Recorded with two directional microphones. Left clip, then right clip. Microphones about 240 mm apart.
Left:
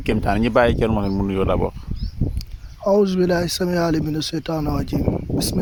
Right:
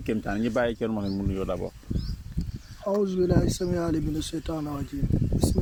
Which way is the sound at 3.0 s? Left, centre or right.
Left.